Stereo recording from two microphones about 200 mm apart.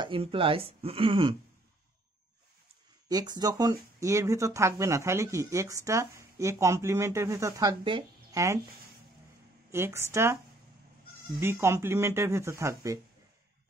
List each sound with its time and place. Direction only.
0.0 s speech: 25° right (ahead or behind)
3.1 s speech: 20° right (ahead or behind)
9.7 s speech: 10° right (ahead or behind)
11.4 s speech: 15° right (ahead or behind)